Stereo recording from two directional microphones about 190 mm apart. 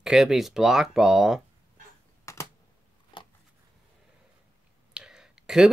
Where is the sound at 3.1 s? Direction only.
25° left (ahead or behind).